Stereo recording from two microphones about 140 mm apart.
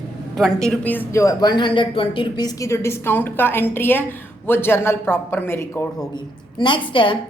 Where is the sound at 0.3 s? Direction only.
5° left (ahead or behind); by 6.1 s 20° left (ahead or behind).